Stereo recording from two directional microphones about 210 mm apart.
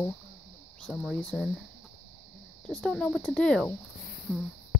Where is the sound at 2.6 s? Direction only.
5° left (ahead or behind).